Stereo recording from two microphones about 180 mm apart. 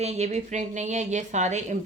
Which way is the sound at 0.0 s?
40° right (ahead or behind).